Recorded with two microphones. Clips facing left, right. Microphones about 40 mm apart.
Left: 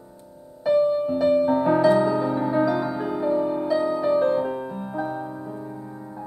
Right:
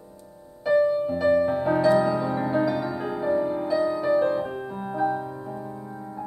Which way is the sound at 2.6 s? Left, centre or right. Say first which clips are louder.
Left 2 dB; left.